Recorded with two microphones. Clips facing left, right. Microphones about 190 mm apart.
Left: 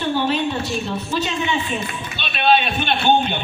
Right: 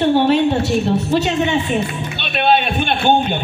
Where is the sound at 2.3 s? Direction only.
55° right (ahead or behind).